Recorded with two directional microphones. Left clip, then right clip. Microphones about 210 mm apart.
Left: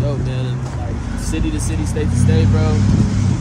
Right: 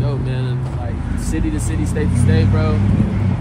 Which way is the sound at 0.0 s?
Centre (ahead or behind).